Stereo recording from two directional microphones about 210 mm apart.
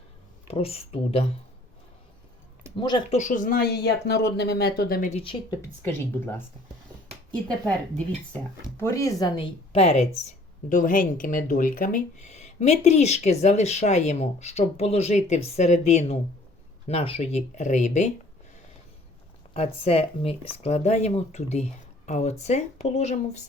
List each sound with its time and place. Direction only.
0.4 s speech: 30° left (ahead or behind)
2.7 s speech: 25° left (ahead or behind)
3.2 s speech: 40° left (ahead or behind)
5.2 s speech: 25° left (ahead or behind)
5.8 s speech: 10° left (ahead or behind)
8.8 s speech: 15° left (ahead or behind); by 18.1 s 35° left (ahead or behind)
19.5 s speech: 30° left (ahead or behind)